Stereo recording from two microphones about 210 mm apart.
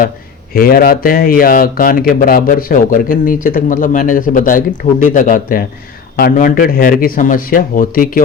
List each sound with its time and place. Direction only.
0.5 s speech: 45° left (ahead or behind)